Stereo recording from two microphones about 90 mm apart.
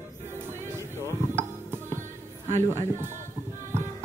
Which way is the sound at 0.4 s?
30° right (ahead or behind).